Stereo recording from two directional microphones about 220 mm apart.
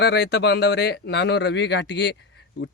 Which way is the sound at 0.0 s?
50° left (ahead or behind).